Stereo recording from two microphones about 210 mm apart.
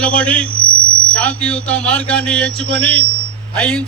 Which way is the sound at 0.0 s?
5° left (ahead or behind).